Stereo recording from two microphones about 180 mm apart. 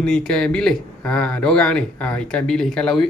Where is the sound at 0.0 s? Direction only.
5° left (ahead or behind).